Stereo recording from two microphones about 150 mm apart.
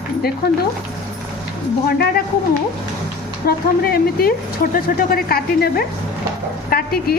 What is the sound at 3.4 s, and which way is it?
Speech, 90° left.